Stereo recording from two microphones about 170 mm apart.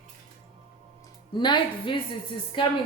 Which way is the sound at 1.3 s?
25° left (ahead or behind).